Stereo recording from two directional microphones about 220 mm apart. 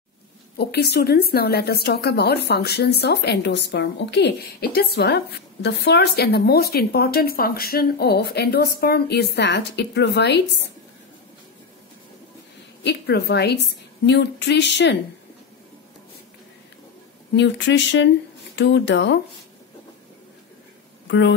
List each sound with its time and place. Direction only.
0.6 s speech: 45° left (ahead or behind)
12.8 s speech: 50° left (ahead or behind)
17.4 s speech: 55° left (ahead or behind)